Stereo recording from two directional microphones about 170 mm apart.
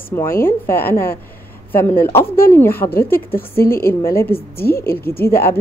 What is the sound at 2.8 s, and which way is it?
Speech, 30° left (ahead or behind).